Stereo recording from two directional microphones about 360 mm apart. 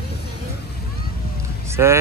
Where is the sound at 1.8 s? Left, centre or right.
Centre.